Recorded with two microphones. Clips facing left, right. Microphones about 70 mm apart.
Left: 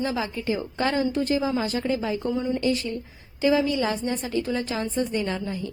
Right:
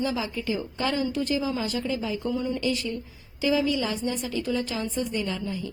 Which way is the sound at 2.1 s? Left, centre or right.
Left.